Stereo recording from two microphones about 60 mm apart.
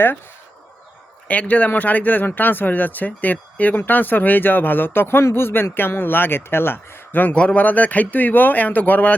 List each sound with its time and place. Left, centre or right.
1.3 s speech: left